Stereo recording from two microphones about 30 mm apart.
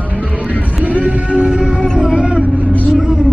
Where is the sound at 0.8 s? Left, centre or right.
Right.